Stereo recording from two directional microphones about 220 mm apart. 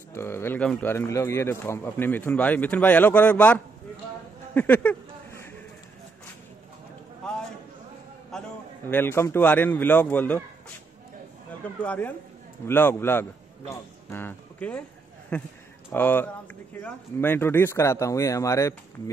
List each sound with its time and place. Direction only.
0.1 s a man's voice: 10° left (ahead or behind)
4.6 s a sound: 10° left (ahead or behind)
8.8 s a man's voice: 10° left (ahead or behind)
11.8 s a man's voice: 5° left (ahead or behind)